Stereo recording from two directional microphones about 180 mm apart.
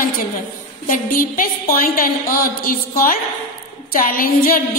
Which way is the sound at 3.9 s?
50° left (ahead or behind).